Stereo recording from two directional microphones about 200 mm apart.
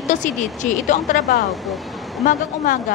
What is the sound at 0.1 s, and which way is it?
A woman's voice, 35° left (ahead or behind).